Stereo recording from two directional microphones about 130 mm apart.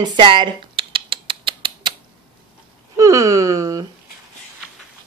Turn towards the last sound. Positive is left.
turn(degrees=-25)  # may be behind; listen again after turning